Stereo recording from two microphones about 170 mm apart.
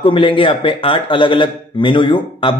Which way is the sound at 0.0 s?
30° left (ahead or behind).